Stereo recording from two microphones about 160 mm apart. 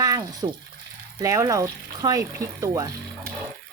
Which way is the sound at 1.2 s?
20° right (ahead or behind).